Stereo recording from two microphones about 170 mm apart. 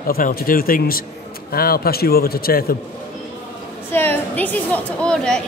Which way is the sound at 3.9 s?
10° left (ahead or behind).